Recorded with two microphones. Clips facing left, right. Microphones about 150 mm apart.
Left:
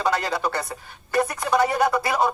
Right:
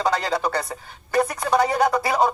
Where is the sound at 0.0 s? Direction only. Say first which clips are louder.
Right 1 dB; 15° right (ahead or behind).